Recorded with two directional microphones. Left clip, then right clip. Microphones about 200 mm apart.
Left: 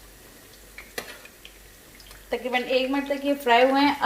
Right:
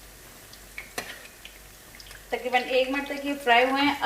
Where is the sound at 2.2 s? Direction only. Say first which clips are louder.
Even; 55° left (ahead or behind).